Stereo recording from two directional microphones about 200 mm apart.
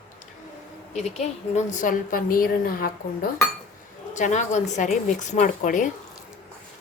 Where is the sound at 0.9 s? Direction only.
35° left (ahead or behind).